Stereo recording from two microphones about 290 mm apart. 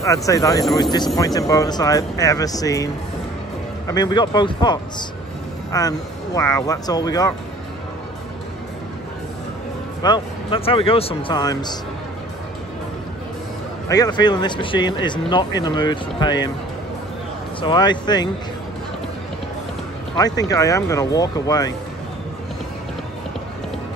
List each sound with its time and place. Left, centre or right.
0.0 s speech: centre
10.0 s speech: centre
13.8 s speech: centre
17.6 s speech: centre
20.3 s speech: centre